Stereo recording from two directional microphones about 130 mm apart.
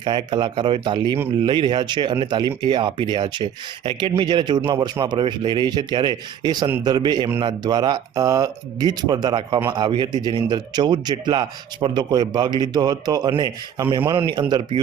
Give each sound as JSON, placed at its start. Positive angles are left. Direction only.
{"t": 0.0, "sound": "speech", "side_deg": -35}